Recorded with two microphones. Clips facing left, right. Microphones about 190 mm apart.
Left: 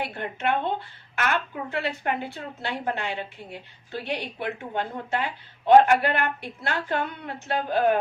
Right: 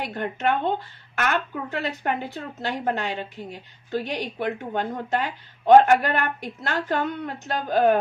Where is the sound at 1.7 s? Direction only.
40° right (ahead or behind).